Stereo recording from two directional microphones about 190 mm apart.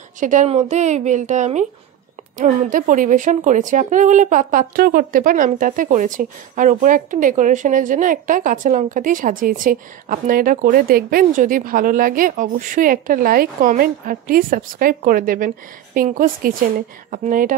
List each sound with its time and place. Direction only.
0.2 s a woman's voice: 40° right (ahead or behind)